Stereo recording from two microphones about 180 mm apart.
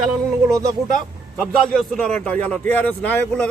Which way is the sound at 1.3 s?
5° left (ahead or behind).